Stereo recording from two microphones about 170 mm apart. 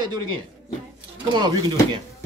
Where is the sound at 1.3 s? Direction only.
25° right (ahead or behind).